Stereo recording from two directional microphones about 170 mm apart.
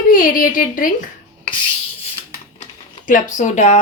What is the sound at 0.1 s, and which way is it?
Speech, 55° left (ahead or behind).